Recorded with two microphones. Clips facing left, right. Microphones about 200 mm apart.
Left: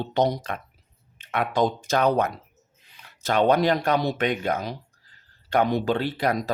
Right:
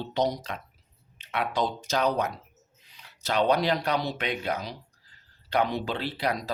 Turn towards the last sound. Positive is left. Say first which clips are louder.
# left 5 dB
turn(degrees=50)  # may be behind; listen again after turning